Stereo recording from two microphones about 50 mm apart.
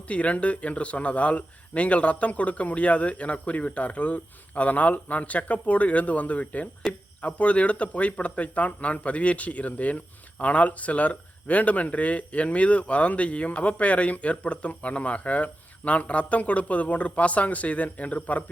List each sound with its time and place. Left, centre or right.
0.1 s speech: left